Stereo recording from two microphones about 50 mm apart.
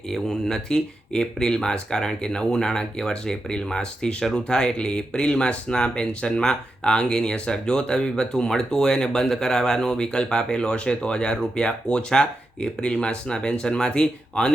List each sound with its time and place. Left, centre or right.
0.1 s speech: centre